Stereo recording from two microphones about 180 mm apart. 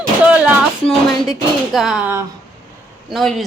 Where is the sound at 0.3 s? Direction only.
5° right (ahead or behind).